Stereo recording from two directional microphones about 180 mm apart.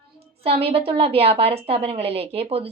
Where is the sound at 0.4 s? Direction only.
30° right (ahead or behind).